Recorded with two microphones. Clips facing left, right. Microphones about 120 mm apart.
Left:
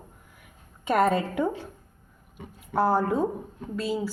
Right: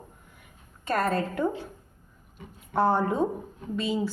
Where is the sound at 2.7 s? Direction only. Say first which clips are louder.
Even; 5° left (ahead or behind).